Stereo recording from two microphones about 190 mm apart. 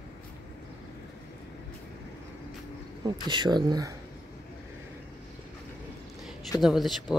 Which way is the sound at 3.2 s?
25° right (ahead or behind).